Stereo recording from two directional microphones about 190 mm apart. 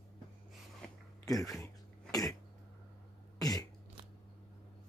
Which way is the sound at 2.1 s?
20° left (ahead or behind).